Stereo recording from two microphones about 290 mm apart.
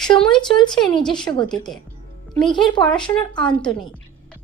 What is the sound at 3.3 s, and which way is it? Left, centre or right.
Speech, centre.